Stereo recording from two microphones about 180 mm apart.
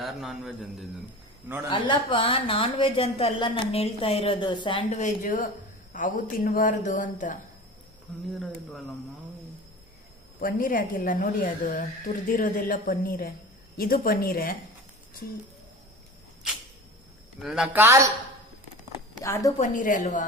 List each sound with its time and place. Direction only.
0.0 s a man's voice: centre (ahead or behind)
1.7 s a woman's voice: 25° left (ahead or behind)
4.9 s a woman's voice: 40° left (ahead or behind)
10.4 s a woman's voice: 50° left (ahead or behind)
17.4 s a man's voice: 5° right (ahead or behind)
17.8 s a woman's voice: 15° right (ahead or behind)
19.2 s a woman's voice: 15° left (ahead or behind)
19.5 s a woman's voice: 45° left (ahead or behind)